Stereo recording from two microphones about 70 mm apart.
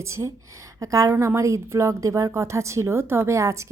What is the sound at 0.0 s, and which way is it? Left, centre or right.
A woman's voice, right.